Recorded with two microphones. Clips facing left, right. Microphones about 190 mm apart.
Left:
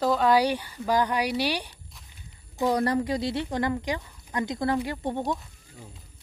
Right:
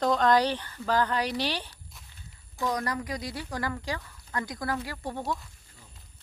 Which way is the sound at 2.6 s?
30° left (ahead or behind).